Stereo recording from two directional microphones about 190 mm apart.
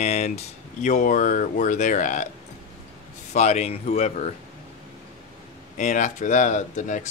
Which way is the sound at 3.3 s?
35° left (ahead or behind).